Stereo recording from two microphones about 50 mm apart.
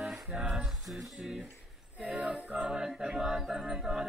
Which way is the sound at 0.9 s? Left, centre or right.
Centre.